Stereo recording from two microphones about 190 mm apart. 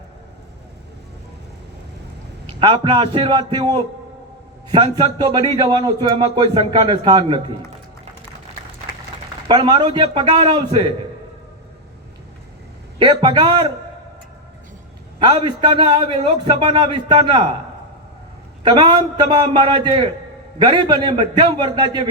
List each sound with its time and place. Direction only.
2.6 s a man's voice: 25° right (ahead or behind)
9.5 s a man's voice: 25° right (ahead or behind)
13.0 s a man's voice: 25° right (ahead or behind)
15.2 s a man's voice: 25° right (ahead or behind)
18.6 s a man's voice: 25° right (ahead or behind)